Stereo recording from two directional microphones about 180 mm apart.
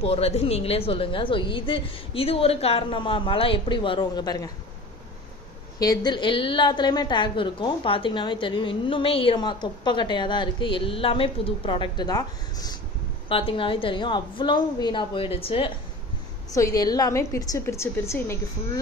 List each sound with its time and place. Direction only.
0.0 s a woman's voice: 35° left (ahead or behind)
5.8 s a woman's voice: 20° left (ahead or behind)
16.5 s a woman's voice: 20° left (ahead or behind)